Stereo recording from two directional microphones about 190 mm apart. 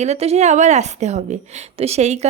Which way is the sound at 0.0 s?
35° right (ahead or behind).